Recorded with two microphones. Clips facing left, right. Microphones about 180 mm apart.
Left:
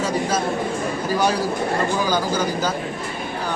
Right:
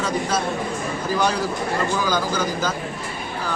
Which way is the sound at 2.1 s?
10° left (ahead or behind).